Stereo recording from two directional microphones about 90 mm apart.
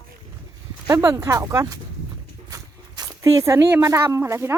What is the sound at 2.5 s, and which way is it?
Zipper, 40° right (ahead or behind).